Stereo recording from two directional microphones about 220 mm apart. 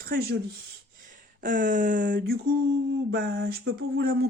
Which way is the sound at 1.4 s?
35° right (ahead or behind).